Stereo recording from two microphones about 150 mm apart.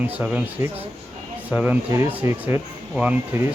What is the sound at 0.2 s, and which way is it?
Speech, 10° right (ahead or behind).